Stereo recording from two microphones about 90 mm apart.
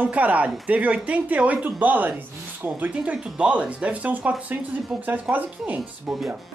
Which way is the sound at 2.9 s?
10° right (ahead or behind).